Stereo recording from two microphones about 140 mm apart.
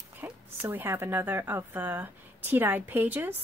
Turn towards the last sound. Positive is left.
turn(degrees=-15)  # may be behind; listen again after turning